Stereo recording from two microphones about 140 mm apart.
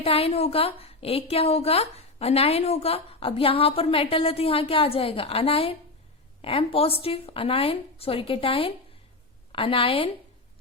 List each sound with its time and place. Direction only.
0.0 s a woman's voice: 45° left (ahead or behind)